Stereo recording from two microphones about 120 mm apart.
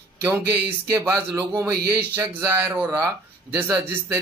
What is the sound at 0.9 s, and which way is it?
Speech, 25° right (ahead or behind).